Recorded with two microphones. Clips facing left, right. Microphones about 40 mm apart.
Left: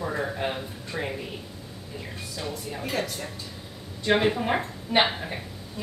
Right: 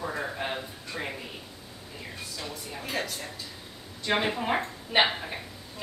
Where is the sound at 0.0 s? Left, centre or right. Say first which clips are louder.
Left 4 dB; centre.